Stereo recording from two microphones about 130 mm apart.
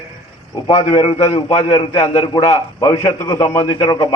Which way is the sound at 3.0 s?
25° left (ahead or behind).